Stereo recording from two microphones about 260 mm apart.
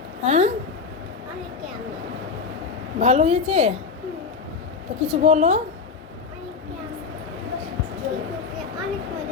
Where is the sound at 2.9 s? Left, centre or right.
Right.